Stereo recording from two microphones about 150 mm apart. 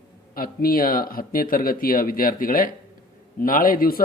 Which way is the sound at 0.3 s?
75° left (ahead or behind).